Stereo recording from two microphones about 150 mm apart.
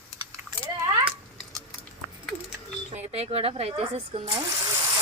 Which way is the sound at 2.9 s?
45° right (ahead or behind).